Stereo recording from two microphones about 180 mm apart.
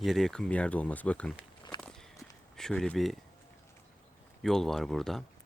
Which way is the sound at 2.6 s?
5° left (ahead or behind).